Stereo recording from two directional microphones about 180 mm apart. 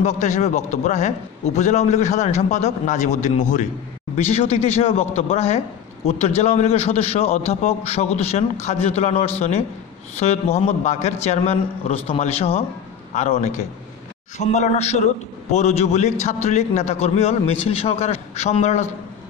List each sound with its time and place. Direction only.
0.0 s a man's voice: 40° left (ahead or behind)